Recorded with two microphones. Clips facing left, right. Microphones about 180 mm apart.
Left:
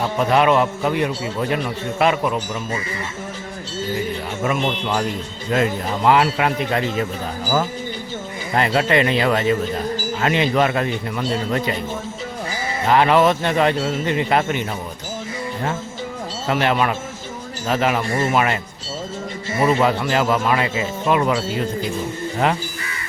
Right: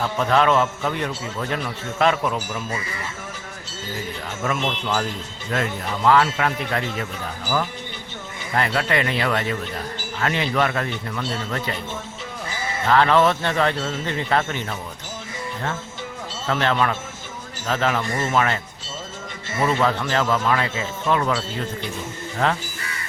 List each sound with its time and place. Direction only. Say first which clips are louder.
0.0 s a man's voice: left 2 dB; 15° left (ahead or behind)
4.4 s speech: left 3 dB; centre (ahead or behind)
5.5 s speech: left 5 dB; 20° left (ahead or behind)
7.4 s speech: left 3 dB; 40° left (ahead or behind)
8.5 s a man's voice: left 4 dB; 20° left (ahead or behind)
12.9 s a man's voice: left 2 dB; 15° left (ahead or behind)
16.5 s a man's voice: left 2 dB; 15° left (ahead or behind)
19.6 s a man's voice: left 3 dB; 15° left (ahead or behind)
22.4 s a man's voice: left 2 dB; 15° left (ahead or behind)